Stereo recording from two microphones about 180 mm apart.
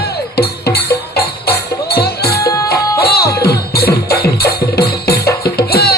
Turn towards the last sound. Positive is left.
turn(degrees=60)  # may be behind; listen again after turning